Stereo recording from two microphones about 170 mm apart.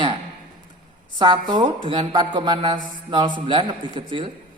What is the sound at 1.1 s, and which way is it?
A woman's voice, 30° right (ahead or behind).